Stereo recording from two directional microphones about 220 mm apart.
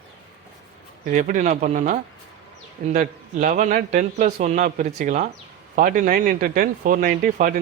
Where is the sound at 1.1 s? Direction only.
35° right (ahead or behind).